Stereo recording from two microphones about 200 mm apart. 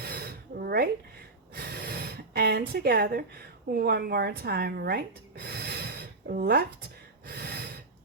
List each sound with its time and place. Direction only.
0.0 s a sound: 50° right (ahead or behind)
3.7 s speech: 50° right (ahead or behind)
7.3 s snort: 50° right (ahead or behind)